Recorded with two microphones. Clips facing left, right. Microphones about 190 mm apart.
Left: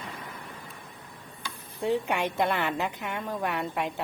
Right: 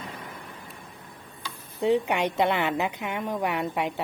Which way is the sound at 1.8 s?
20° right (ahead or behind).